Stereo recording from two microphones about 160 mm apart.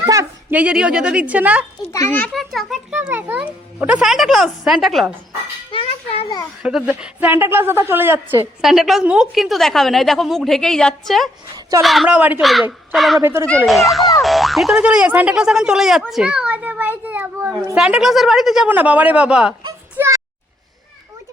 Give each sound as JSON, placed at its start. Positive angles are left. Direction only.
{"t": 0.0, "sound": "a sound", "side_deg": -20}
{"t": 0.5, "sound": "a woman's voice", "side_deg": -5}
{"t": 1.9, "sound": "a child's voice", "side_deg": 15}
{"t": 5.7, "sound": "a sound", "side_deg": 35}
{"t": 6.6, "sound": "a woman's voice", "side_deg": -5}
{"t": 8.6, "sound": "speech", "side_deg": 0}
{"t": 13.2, "sound": "a woman's voice", "side_deg": -15}
{"t": 13.7, "sound": "speech", "side_deg": 0}
{"t": 20.0, "sound": "a sound", "side_deg": -20}